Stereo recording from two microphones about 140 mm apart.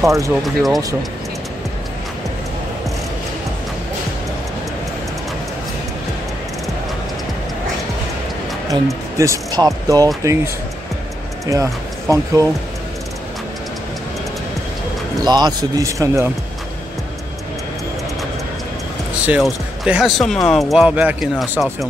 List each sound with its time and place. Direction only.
0.0 s speech: 20° right (ahead or behind)
0.3 s speech: centre (ahead or behind)
9.2 s speech: 25° right (ahead or behind)
15.2 s speech: 30° right (ahead or behind)
19.2 s speech: 5° right (ahead or behind)